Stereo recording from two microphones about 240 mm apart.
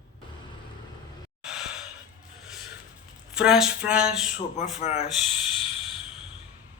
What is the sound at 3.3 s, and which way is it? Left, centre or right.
Speech, centre.